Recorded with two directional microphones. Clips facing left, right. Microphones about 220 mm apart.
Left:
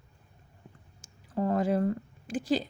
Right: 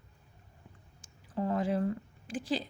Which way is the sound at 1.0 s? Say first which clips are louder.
Left 4 dB; 45° left (ahead or behind).